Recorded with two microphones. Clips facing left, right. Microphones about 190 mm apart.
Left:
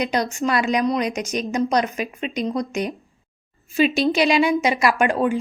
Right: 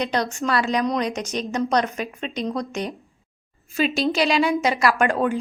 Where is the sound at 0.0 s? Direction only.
10° left (ahead or behind).